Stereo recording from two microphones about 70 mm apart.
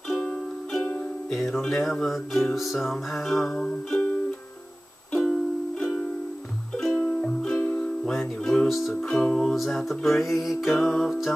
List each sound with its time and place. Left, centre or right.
0.1 s music: centre
1.3 s music: centre
5.2 s music: centre
7.6 s ukulele: left
8.0 s music: centre
8.9 s music: centre